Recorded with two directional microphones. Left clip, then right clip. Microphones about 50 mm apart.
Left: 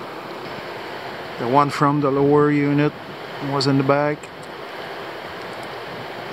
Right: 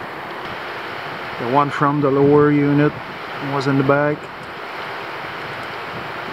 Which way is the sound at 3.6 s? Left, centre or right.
Left.